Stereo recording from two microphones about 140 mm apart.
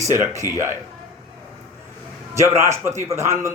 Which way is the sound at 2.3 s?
20° right (ahead or behind).